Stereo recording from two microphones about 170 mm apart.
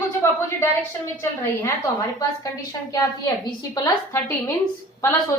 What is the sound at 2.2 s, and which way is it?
A woman's voice, 20° left (ahead or behind).